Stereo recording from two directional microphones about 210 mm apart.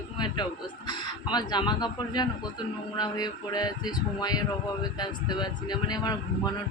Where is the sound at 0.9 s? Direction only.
20° left (ahead or behind).